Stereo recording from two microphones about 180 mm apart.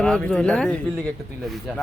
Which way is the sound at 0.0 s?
5° left (ahead or behind).